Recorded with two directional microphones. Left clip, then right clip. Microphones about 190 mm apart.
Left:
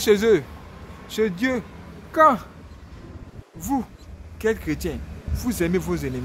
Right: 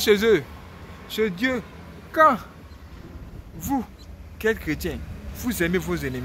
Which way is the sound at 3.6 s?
10° left (ahead or behind).